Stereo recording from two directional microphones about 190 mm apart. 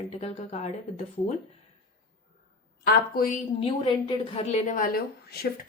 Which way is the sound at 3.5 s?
30° left (ahead or behind).